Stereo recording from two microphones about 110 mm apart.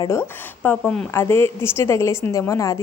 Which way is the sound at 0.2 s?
15° left (ahead or behind).